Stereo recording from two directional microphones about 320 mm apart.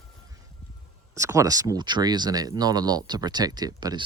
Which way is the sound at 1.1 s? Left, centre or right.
Centre.